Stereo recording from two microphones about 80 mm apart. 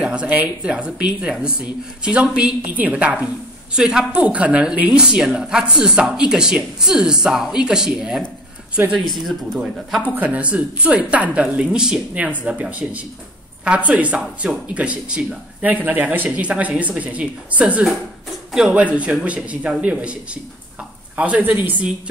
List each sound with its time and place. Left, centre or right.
0.0 s speech: centre
9.3 s speech: centre
10.1 s speech: centre
21.2 s speech: centre